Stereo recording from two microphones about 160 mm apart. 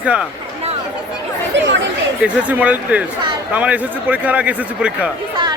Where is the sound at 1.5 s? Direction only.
90° right.